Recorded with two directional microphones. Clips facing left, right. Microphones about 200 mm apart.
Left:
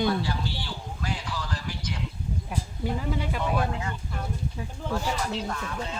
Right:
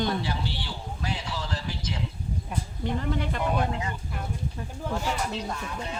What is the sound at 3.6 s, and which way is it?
Speech, 20° right (ahead or behind).